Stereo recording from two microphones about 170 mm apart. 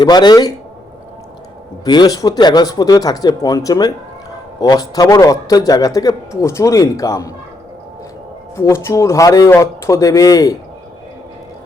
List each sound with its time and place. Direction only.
0.0 s a man's voice: 25° left (ahead or behind)
1.8 s a man's voice: 25° left (ahead or behind)
8.5 s a man's voice: 15° left (ahead or behind)